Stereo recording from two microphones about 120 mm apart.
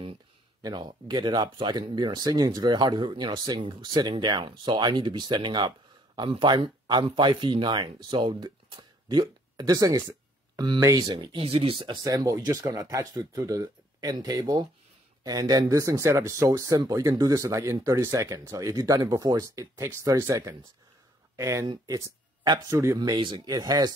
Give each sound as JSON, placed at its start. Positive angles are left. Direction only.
{"t": 0.6, "sound": "speech", "side_deg": -35}
{"t": 11.1, "sound": "speech", "side_deg": -40}
{"t": 11.4, "sound": "speech", "side_deg": -55}
{"t": 23.5, "sound": "speech", "side_deg": -30}